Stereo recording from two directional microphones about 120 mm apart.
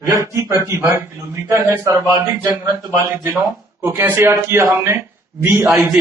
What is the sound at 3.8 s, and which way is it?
A man's voice, 20° right (ahead or behind).